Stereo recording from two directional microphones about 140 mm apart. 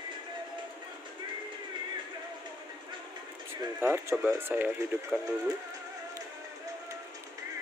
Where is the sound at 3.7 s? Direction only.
15° right (ahead or behind).